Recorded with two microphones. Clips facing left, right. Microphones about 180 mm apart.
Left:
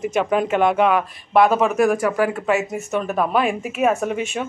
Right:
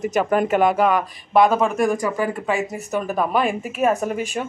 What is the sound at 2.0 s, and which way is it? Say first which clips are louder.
Speech: left 3 dB; 75° left (ahead or behind).